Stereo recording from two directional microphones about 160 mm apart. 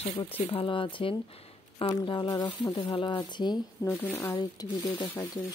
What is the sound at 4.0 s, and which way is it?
Speech, 15° left (ahead or behind).